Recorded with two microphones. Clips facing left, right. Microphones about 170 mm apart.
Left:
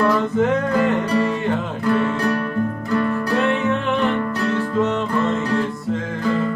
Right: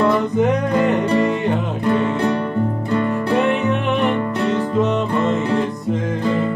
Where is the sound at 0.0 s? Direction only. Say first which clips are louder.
Right 2 dB; 20° right (ahead or behind).